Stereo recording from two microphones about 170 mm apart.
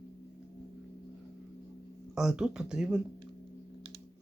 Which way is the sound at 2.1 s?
5° right (ahead or behind).